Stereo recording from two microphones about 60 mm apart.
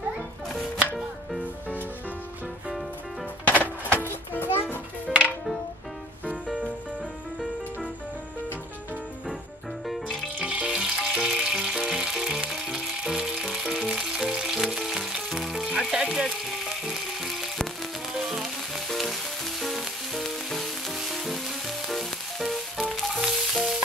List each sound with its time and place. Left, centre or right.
3.4 s music: left
9.8 s music: centre
10.2 s music: centre
15.9 s frying: centre
18.1 s sizzle: centre
23.2 s frying: centre